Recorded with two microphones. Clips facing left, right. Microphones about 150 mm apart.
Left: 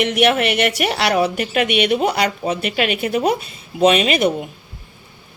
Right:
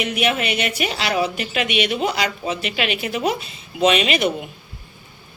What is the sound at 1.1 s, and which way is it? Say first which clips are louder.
A woman's voice: left 4 dB; 50° left (ahead or behind).